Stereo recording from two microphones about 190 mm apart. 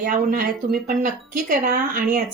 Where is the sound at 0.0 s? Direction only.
50° right (ahead or behind).